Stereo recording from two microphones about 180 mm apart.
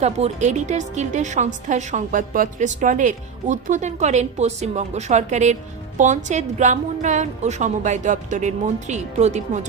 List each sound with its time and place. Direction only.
0.0 s a woman's voice: 40° right (ahead or behind)